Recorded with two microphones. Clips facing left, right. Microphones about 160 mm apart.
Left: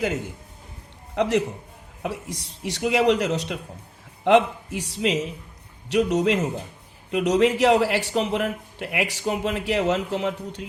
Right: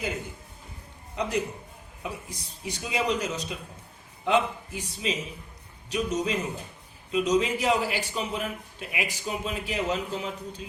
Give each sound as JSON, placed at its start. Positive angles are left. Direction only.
{"t": 1.1, "sound": "a man's voice", "side_deg": 90}
{"t": 2.0, "sound": "a man's voice", "side_deg": 75}